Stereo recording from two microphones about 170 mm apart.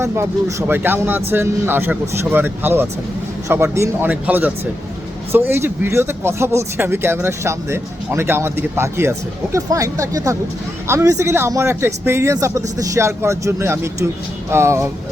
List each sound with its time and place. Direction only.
0.0 s speech: 15° right (ahead or behind)